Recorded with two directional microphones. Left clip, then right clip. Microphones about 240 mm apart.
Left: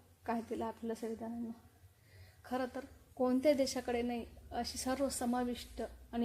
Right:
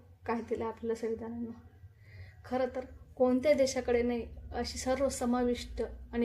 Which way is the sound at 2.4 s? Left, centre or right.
Left.